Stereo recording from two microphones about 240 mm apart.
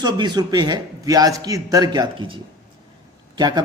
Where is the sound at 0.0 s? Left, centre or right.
Centre.